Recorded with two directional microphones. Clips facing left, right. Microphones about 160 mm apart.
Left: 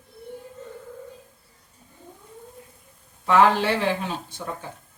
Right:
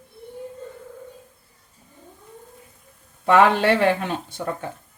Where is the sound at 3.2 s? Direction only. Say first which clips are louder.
Right 2 dB; 65° right (ahead or behind).